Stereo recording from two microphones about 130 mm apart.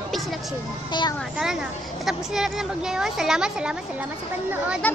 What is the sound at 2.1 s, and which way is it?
A woman's voice, 5° right (ahead or behind).